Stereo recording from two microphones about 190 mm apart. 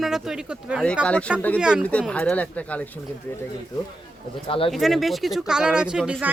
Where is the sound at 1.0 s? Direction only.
5° left (ahead or behind).